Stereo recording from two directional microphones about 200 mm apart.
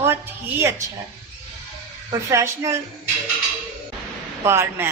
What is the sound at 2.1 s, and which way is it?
Speech, 15° right (ahead or behind).